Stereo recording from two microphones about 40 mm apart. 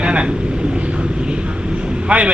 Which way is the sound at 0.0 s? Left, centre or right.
Right.